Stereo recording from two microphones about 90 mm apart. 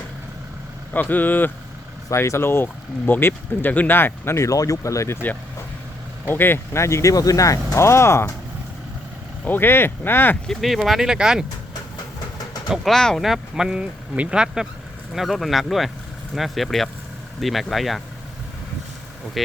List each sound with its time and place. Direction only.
0.9 s speech: 20° left (ahead or behind)
2.0 s speech: 35° left (ahead or behind)
6.2 s speech: 25° left (ahead or behind)
9.4 s speech: 20° left (ahead or behind)
10.4 s speech: 5° left (ahead or behind)
12.7 s speech: centre (ahead or behind)